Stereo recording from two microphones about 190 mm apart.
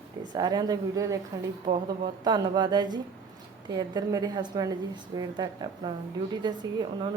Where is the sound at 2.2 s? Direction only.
20° right (ahead or behind).